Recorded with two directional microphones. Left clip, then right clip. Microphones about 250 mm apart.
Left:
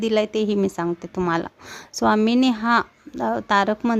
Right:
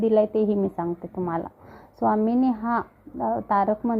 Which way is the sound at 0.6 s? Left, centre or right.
Left.